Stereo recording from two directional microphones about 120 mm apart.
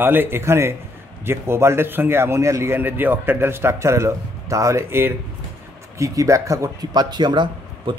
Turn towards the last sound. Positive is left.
turn(degrees=-40)  # may be behind; listen again after turning